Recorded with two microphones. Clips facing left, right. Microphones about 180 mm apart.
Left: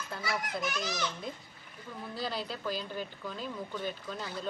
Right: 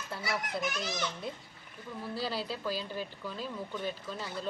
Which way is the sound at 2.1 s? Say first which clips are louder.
Right 1 dB; 5° right (ahead or behind).